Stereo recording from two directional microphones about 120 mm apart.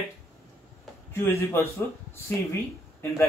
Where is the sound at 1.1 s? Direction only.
20° left (ahead or behind).